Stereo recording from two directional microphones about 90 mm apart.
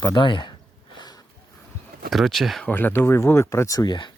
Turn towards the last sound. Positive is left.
turn(degrees=55)  # may be behind; listen again after turning